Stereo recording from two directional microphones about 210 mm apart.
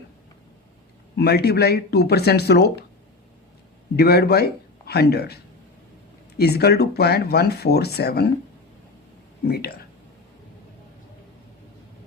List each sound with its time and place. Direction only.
1.1 s speech: 50° left (ahead or behind)
3.9 s speech: 50° left (ahead or behind)
9.5 s speech: 50° left (ahead or behind)